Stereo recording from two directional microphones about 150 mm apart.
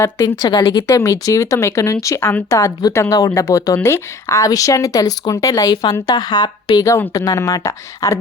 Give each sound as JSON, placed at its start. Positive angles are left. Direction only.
{"t": 0.0, "sound": "speech", "side_deg": 25}